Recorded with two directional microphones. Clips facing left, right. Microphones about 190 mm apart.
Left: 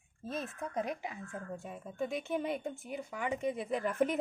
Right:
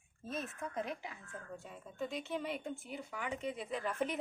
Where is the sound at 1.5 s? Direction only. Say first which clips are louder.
Left 4 dB; 50° left (ahead or behind).